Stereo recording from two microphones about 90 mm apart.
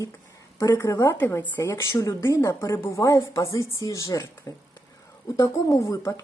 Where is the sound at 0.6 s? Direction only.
40° left (ahead or behind).